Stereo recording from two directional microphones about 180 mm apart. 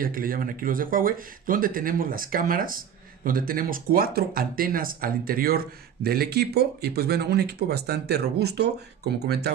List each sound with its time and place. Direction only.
0.0 s speech: 50° right (ahead or behind)